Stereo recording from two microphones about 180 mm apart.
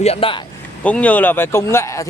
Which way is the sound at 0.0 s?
30° left (ahead or behind).